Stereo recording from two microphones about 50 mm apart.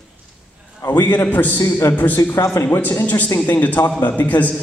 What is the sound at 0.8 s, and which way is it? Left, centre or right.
Speech, left.